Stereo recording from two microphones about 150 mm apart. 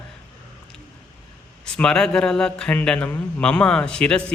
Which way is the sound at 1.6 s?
5° left (ahead or behind).